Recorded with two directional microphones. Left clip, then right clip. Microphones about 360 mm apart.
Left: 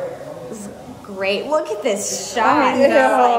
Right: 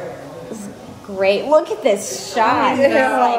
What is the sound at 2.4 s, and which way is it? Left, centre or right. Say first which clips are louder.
A woman's voice: even; centre.